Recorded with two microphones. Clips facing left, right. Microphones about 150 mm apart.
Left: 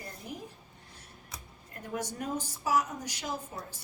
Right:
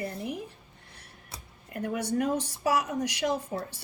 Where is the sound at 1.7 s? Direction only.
65° right (ahead or behind).